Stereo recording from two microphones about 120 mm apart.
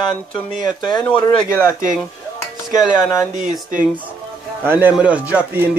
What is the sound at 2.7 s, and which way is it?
Speech, 5° right (ahead or behind).